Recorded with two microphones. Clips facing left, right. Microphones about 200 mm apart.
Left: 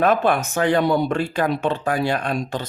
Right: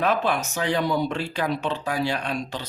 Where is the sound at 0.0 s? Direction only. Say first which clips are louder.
Left 5 dB; 50° left (ahead or behind).